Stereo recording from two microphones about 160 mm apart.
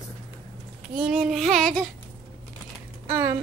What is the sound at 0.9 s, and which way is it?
Child singing, 5° right (ahead or behind).